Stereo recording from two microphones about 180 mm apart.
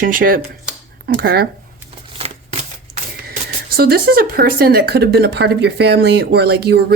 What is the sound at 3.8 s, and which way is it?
Speech, 60° right (ahead or behind).